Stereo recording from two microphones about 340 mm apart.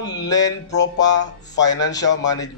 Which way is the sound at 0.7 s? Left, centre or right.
Left.